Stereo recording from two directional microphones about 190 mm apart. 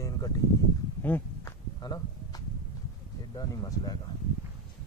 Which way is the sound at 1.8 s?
20° left (ahead or behind).